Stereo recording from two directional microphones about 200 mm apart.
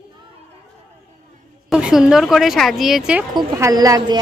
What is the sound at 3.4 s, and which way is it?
Speech, 15° right (ahead or behind).